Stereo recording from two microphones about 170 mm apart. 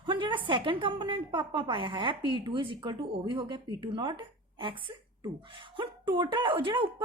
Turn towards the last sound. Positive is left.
turn(degrees=-30)  # may be behind; listen again after turning